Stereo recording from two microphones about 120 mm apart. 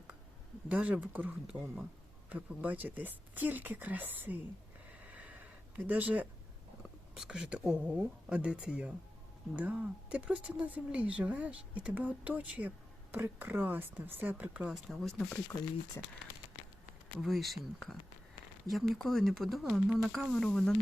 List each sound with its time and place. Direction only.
0.7 s speech: 10° right (ahead or behind)
4.9 s a sound: 10° right (ahead or behind)
7.2 s speech: 5° right (ahead or behind)
17.2 s speech: centre (ahead or behind)